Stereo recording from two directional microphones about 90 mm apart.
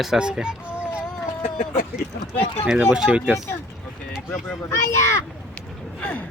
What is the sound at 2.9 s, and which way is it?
Speech, 10° right (ahead or behind).